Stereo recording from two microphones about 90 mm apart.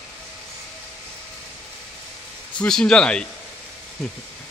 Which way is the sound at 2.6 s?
5° left (ahead or behind).